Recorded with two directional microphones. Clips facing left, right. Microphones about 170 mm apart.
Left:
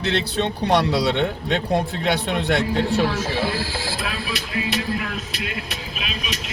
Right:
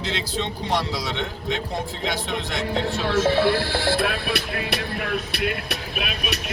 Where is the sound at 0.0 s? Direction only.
65° left (ahead or behind).